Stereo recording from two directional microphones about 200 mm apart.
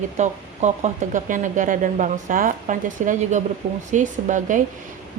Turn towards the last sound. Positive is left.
turn(degrees=-40)  # may be behind; listen again after turning